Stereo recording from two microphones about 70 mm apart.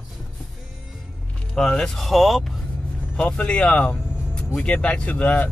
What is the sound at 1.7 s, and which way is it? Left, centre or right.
Speech, centre.